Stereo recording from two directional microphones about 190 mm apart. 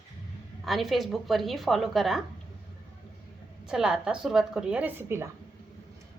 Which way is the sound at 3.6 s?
5° right (ahead or behind).